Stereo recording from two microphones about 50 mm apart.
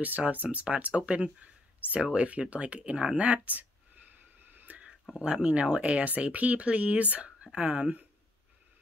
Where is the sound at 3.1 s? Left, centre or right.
Right.